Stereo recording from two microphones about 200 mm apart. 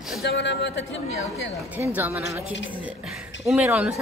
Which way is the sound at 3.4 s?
5° right (ahead or behind).